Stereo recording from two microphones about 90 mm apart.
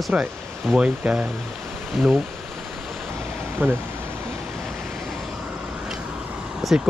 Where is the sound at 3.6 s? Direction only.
25° right (ahead or behind).